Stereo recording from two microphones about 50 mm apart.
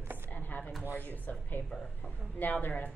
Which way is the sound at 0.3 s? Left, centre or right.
Left.